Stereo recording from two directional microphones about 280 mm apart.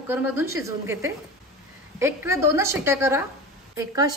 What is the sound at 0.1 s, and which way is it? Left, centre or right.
A woman's voice, centre.